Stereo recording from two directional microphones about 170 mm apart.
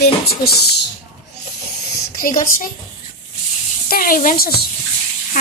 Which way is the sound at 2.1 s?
55° left (ahead or behind).